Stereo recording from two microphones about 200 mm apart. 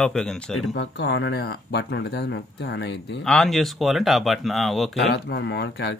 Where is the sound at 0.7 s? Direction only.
60° left (ahead or behind).